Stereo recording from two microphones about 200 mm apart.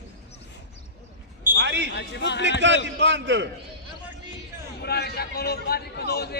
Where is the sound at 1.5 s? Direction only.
60° right (ahead or behind).